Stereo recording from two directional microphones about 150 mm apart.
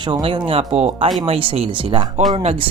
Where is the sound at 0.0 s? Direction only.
30° right (ahead or behind).